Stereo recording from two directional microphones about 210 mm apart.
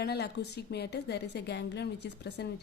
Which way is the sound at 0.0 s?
50° left (ahead or behind).